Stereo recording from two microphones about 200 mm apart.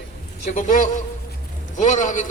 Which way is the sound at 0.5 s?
40° left (ahead or behind).